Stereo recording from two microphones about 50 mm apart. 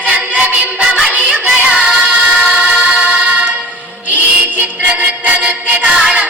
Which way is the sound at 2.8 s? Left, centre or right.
Right.